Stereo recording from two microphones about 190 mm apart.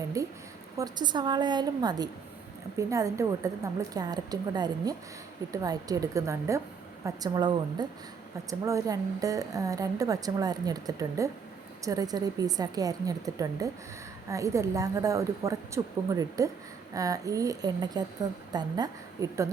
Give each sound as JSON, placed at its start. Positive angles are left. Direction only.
{"t": 0.2, "sound": "a woman's voice", "side_deg": -15}